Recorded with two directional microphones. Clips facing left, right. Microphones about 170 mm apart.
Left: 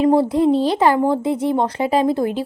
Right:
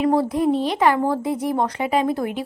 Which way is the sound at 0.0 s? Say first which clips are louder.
Left 4 dB; 25° left (ahead or behind).